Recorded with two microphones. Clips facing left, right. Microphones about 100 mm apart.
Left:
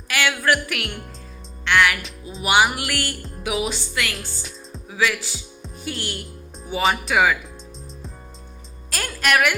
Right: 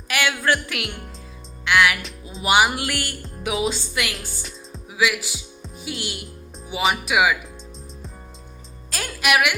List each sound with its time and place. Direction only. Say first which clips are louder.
0.1 s speech: left 1 dB; 20° right (ahead or behind)
1.6 s music: even; 15° right (ahead or behind)
2.4 s speech: even; 20° right (ahead or behind)
4.1 s speech: left 1 dB; centre (ahead or behind)
4.9 s speech: even; 15° right (ahead or behind)
5.6 s music: left 1 dB; 5° right (ahead or behind)
6.7 s speech: left 1 dB; 5° right (ahead or behind)
8.9 s music: even; 5° right (ahead or behind)